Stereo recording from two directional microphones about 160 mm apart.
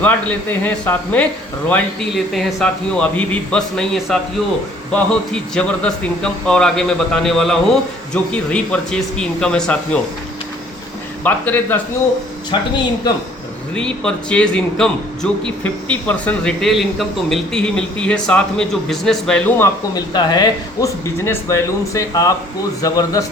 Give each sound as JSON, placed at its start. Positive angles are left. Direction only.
{"t": 0.0, "sound": "a man's voice", "side_deg": 10}
{"t": 11.2, "sound": "a man's voice", "side_deg": 10}
{"t": 12.5, "sound": "speech", "side_deg": 30}
{"t": 13.7, "sound": "a man's voice", "side_deg": 5}